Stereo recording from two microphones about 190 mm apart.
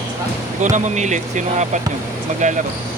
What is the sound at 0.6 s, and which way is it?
Speech, 40° right (ahead or behind).